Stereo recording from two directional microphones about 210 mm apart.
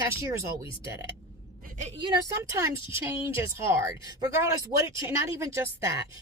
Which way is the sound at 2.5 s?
15° right (ahead or behind).